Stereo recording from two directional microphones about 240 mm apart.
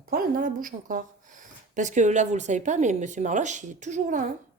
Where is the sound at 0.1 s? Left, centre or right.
Right.